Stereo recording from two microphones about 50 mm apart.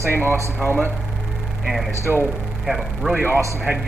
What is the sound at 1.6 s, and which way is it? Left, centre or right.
A man's voice, centre.